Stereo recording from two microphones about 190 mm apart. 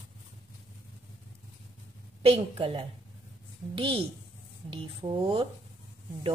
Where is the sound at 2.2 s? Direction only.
30° right (ahead or behind).